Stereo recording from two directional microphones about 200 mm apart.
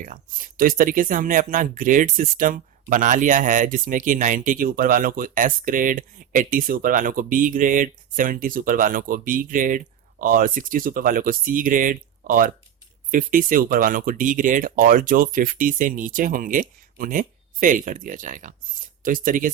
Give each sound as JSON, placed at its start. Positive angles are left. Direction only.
{"t": 0.0, "sound": "speech", "side_deg": -40}